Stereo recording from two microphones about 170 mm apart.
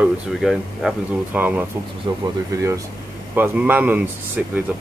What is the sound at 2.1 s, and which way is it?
Speech, 25° right (ahead or behind).